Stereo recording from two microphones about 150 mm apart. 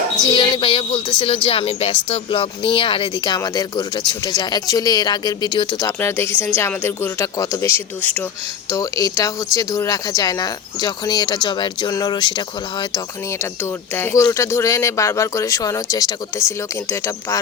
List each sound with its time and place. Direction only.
0.3 s speech: 30° left (ahead or behind)
13.4 s speech: 15° left (ahead or behind)